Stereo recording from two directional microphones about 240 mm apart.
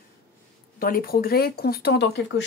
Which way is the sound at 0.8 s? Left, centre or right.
Left.